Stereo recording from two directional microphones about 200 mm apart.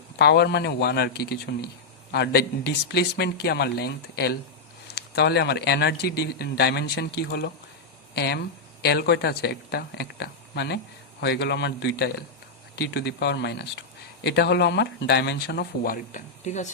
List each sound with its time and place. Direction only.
0.2 s speech: 55° left (ahead or behind); by 16.6 s 35° left (ahead or behind)